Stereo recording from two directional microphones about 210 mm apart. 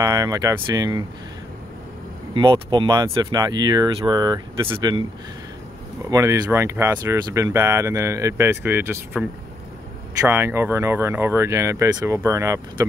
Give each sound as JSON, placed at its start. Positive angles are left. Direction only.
{"t": 0.0, "sound": "speech", "side_deg": -15}
{"t": 2.3, "sound": "speech", "side_deg": -20}
{"t": 6.0, "sound": "speech", "side_deg": -15}
{"t": 10.2, "sound": "speech", "side_deg": -10}